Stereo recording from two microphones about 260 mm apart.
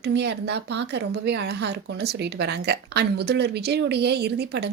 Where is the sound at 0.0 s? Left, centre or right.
Right.